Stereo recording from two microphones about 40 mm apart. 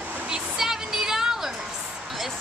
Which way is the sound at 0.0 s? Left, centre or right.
Right.